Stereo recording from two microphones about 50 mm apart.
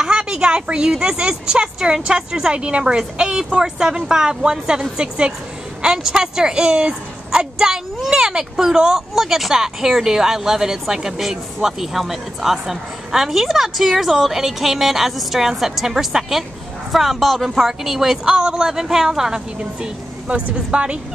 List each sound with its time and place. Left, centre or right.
0.0 s a woman's voice: centre
19.6 s speech: right